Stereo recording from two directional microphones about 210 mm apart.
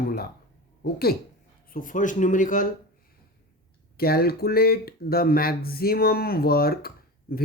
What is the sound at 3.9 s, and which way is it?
Speech, 45° left (ahead or behind).